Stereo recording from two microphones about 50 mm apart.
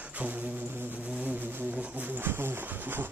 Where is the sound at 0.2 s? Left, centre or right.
Right.